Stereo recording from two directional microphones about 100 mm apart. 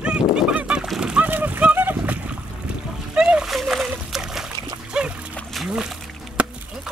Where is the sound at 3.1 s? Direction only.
5° right (ahead or behind).